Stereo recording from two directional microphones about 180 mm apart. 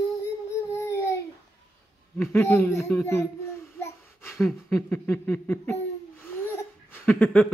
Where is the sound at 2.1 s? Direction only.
15° left (ahead or behind).